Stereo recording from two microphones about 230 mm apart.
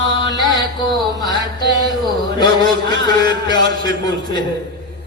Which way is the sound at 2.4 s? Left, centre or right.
Centre.